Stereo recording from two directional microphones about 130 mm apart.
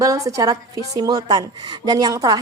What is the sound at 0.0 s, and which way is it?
A woman's voice, 25° right (ahead or behind).